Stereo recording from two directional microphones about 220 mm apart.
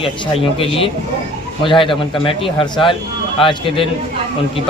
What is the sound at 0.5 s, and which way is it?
Speech, 25° left (ahead or behind).